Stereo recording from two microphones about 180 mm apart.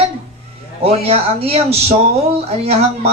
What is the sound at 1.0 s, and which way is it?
Speech, 35° right (ahead or behind).